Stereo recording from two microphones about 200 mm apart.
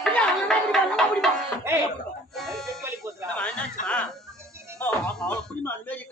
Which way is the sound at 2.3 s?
Centre (ahead or behind).